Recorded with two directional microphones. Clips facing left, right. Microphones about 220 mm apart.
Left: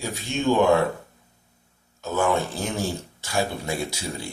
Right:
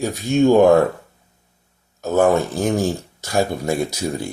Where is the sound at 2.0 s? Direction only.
40° right (ahead or behind).